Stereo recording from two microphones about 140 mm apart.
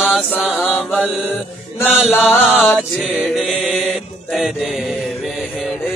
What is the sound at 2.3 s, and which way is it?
Music, 15° left (ahead or behind).